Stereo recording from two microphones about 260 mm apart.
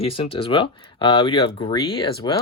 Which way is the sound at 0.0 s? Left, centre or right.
Left.